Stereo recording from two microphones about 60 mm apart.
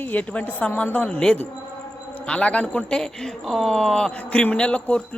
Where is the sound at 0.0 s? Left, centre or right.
Left.